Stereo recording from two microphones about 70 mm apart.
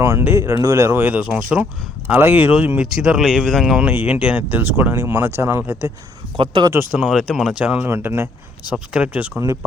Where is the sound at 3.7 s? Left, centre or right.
Right.